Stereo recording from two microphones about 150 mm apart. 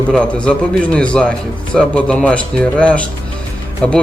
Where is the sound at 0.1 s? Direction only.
5° left (ahead or behind).